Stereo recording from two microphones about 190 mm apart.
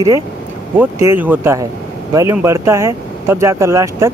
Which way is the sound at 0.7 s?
10° right (ahead or behind).